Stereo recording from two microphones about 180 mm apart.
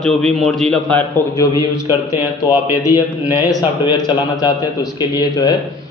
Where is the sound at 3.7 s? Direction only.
25° left (ahead or behind).